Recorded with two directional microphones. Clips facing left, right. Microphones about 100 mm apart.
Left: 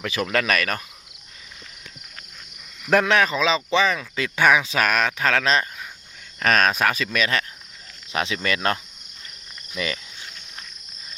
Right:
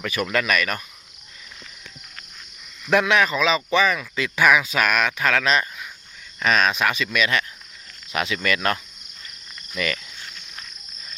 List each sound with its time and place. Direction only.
0.0 s speech: 30° left (ahead or behind)
2.8 s speech: 45° left (ahead or behind)
6.4 s speech: 45° left (ahead or behind); by 10.0 s 25° left (ahead or behind)